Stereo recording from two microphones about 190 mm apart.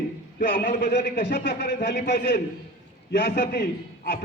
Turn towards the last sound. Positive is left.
turn(degrees=55)  # may be behind; listen again after turning